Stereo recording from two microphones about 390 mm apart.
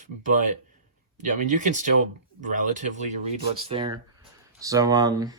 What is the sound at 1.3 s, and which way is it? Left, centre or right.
Speech, centre.